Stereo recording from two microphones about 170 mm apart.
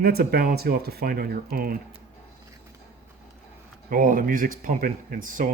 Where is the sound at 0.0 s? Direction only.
65° right (ahead or behind).